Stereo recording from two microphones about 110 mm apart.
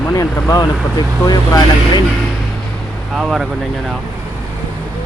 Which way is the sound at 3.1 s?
5° right (ahead or behind).